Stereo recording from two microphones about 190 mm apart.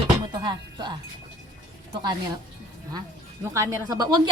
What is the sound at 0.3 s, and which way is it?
Music, 20° right (ahead or behind).